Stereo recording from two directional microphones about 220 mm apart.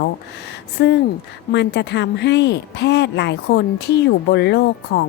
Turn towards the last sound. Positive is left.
turn(degrees=50)  # may be behind; listen again after turning